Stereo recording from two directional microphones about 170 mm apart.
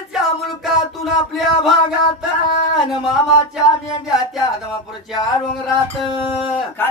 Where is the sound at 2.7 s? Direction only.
Centre (ahead or behind).